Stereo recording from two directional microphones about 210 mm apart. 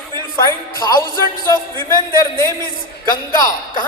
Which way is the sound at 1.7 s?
10° left (ahead or behind).